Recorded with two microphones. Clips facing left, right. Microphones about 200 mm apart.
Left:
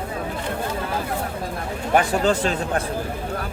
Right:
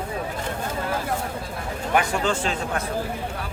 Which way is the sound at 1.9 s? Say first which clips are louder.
Left 4 dB; 40° left (ahead or behind).